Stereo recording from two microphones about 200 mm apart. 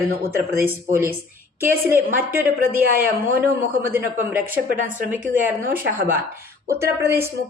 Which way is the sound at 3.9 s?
10° right (ahead or behind).